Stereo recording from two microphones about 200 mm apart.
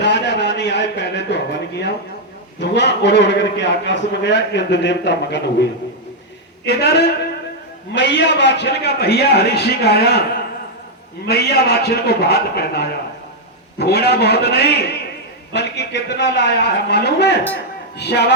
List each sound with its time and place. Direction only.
0.0 s a sound: 60° left (ahead or behind)
2.6 s a man's voice: 60° left (ahead or behind)
6.7 s a man's voice: 55° left (ahead or behind)
11.3 s a man's voice: 50° left (ahead or behind)